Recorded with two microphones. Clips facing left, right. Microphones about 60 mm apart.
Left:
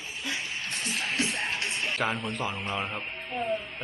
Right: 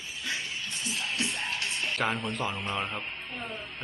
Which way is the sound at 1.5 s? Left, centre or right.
Left.